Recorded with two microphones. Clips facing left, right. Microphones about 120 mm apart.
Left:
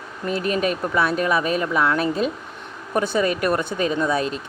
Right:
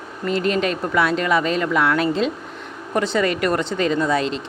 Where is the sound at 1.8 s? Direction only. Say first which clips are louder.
Right 1 dB; 75° right (ahead or behind).